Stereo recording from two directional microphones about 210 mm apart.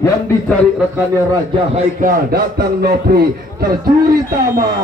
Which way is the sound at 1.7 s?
45° right (ahead or behind).